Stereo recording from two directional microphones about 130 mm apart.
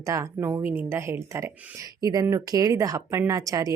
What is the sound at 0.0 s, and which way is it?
Speech, 25° right (ahead or behind).